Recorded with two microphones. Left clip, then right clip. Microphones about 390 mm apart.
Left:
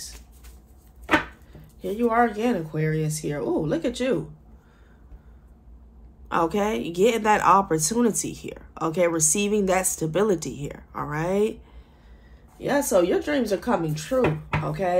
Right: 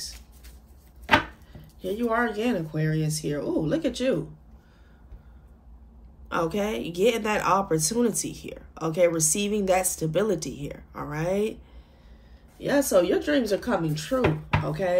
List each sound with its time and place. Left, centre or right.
1.8 s a woman's voice: centre
6.2 s a woman's voice: centre
12.6 s a woman's voice: centre